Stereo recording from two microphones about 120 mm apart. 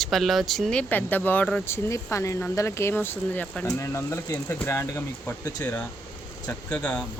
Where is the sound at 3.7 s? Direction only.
25° left (ahead or behind).